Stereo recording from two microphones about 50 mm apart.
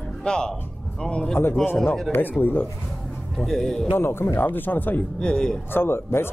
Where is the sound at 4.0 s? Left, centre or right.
Left.